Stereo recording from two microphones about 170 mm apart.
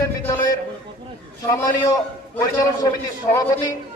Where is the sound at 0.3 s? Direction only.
20° left (ahead or behind).